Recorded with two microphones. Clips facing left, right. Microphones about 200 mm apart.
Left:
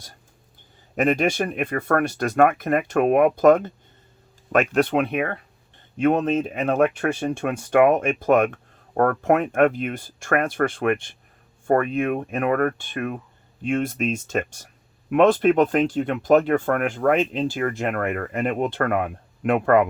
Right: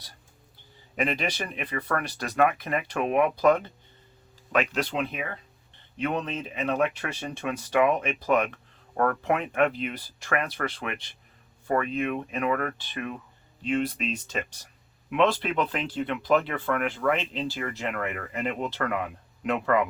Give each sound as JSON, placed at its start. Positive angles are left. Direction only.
{"t": 0.9, "sound": "speech", "side_deg": 45}
{"t": 6.0, "sound": "speech", "side_deg": 50}